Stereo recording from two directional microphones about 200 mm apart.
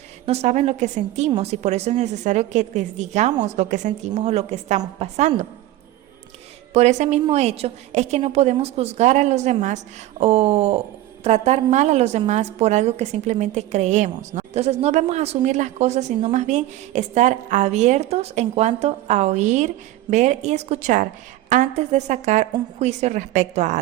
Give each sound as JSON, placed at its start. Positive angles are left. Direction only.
{"t": 0.3, "sound": "a woman's voice", "side_deg": -30}
{"t": 6.7, "sound": "a woman's voice", "side_deg": -35}